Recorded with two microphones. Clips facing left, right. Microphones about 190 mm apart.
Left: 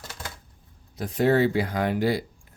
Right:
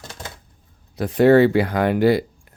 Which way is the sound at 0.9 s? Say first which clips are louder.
Right 8 dB; 70° right (ahead or behind).